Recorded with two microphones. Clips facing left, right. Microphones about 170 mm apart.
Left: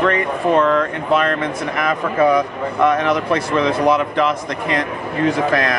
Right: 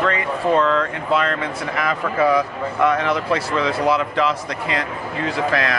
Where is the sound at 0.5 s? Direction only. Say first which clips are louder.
Left 3 dB; 55° left (ahead or behind).